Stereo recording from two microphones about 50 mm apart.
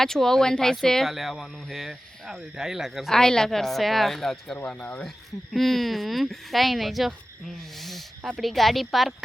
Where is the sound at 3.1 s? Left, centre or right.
Centre.